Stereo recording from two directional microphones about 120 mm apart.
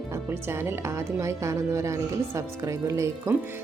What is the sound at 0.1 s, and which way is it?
Speech, 20° right (ahead or behind).